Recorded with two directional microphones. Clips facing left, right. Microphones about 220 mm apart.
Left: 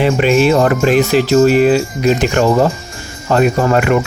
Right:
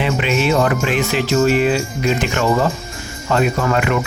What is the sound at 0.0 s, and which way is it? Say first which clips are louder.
Speech: left 7 dB; 40° left (ahead or behind).